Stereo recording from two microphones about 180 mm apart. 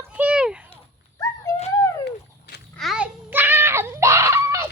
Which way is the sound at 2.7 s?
Centre (ahead or behind).